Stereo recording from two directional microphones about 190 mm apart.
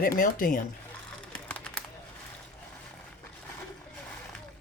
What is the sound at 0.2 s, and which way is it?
Speech, 45° left (ahead or behind).